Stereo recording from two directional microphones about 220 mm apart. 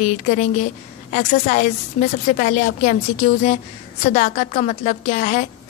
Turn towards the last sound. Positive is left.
turn(degrees=35)  # may be behind; listen again after turning